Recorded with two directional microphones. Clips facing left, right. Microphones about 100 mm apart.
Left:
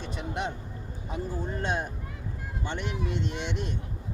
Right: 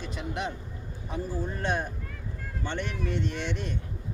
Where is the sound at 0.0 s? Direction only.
30° left (ahead or behind).